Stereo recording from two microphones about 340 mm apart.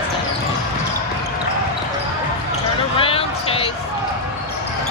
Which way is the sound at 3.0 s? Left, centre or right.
Centre.